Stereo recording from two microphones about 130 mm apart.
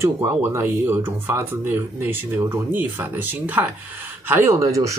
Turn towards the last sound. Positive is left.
turn(degrees=-25)  # may be behind; listen again after turning